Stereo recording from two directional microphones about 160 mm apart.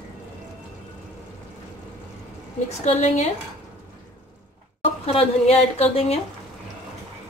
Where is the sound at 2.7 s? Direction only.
40° left (ahead or behind).